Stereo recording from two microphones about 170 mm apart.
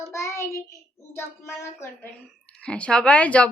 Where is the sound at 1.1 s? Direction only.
15° left (ahead or behind).